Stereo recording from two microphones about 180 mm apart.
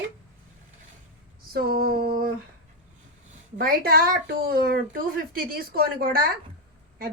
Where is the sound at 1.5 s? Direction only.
60° right (ahead or behind).